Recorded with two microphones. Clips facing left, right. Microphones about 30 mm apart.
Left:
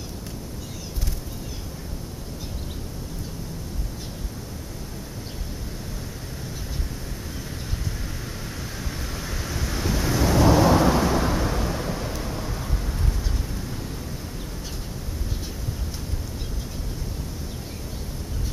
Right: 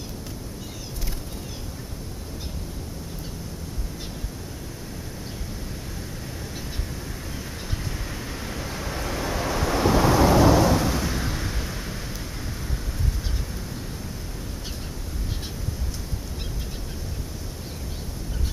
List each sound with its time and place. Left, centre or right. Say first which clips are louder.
8.1 s vehicle: right 2 dB; centre
10.4 s thunder: even; centre
10.7 s thunder: left 5 dB; centre